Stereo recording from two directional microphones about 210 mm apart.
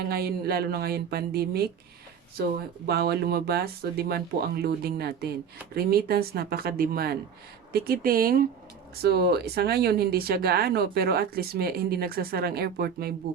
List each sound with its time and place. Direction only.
0.0 s speech: 50° right (ahead or behind)
2.8 s speech: 50° right (ahead or behind)